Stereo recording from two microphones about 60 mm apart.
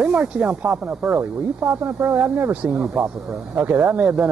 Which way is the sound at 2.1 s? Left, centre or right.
Right.